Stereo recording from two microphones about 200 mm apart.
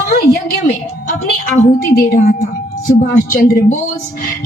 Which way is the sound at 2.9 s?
45° left (ahead or behind).